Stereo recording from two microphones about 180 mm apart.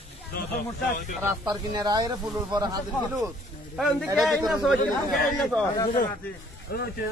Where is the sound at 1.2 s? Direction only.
15° right (ahead or behind).